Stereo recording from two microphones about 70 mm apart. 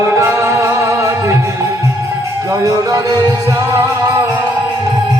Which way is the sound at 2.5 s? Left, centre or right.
Right.